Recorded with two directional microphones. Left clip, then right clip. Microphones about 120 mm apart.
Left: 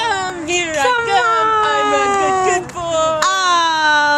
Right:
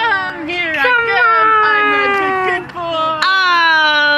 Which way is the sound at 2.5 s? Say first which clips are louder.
Left 1 dB; 30° left (ahead or behind).